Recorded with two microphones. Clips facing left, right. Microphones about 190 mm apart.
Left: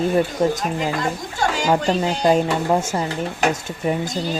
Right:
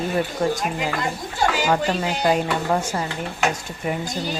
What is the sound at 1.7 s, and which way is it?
Speech, 25° left (ahead or behind).